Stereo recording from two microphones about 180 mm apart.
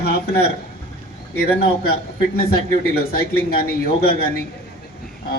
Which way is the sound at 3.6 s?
60° left (ahead or behind).